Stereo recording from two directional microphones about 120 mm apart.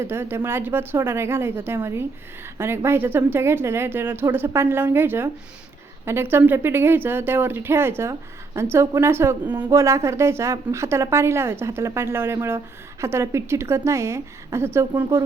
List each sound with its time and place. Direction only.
0.0 s a woman's voice: 20° right (ahead or behind)